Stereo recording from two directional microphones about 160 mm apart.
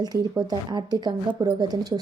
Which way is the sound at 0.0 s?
25° right (ahead or behind).